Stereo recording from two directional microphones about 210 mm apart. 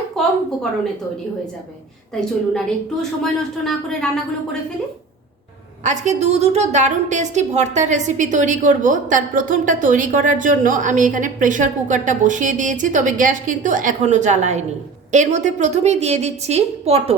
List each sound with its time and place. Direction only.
0.2 s a sound: centre (ahead or behind)
2.5 s a woman's voice: 5° left (ahead or behind)
5.8 s a woman's voice: 35° right (ahead or behind)